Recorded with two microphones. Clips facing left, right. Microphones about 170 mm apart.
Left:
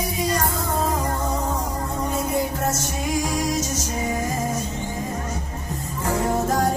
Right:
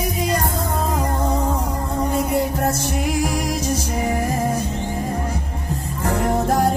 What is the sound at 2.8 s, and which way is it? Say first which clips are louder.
Music: right 3 dB; 10° right (ahead or behind).